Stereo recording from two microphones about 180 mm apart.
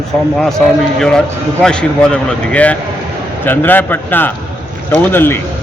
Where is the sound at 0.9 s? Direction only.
5° left (ahead or behind).